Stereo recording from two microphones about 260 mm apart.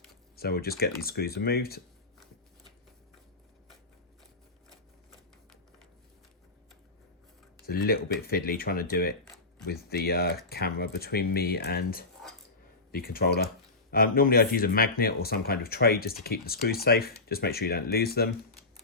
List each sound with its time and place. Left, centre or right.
0.3 s speech: left
7.7 s speech: left